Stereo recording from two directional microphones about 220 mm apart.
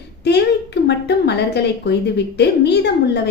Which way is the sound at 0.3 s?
50° left (ahead or behind).